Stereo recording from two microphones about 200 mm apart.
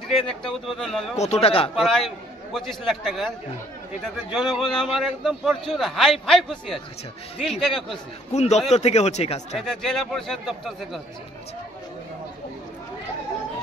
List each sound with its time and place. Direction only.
0.3 s a man's voice: 5° left (ahead or behind)
1.1 s speech: 35° left (ahead or behind)
1.8 s a man's voice: centre (ahead or behind)
8.3 s speech: 35° left (ahead or behind)
9.6 s a man's voice: centre (ahead or behind)